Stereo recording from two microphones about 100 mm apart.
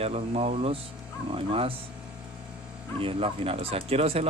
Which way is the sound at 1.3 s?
70° right (ahead or behind).